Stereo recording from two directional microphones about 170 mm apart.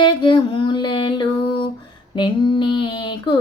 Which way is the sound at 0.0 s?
30° left (ahead or behind).